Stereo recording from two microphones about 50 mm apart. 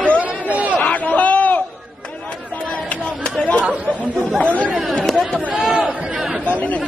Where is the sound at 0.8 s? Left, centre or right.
Left.